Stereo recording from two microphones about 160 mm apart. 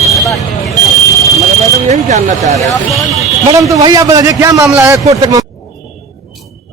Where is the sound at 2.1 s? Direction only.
45° right (ahead or behind).